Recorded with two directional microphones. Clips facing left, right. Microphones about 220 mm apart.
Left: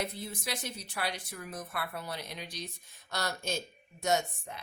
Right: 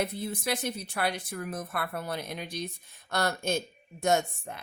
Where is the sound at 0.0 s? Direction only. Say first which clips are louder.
Right 6 dB; 55° right (ahead or behind).